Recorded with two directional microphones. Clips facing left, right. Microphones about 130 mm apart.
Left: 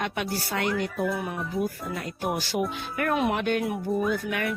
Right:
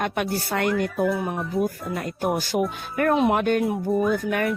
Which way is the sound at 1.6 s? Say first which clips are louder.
Right 4 dB; 50° right (ahead or behind).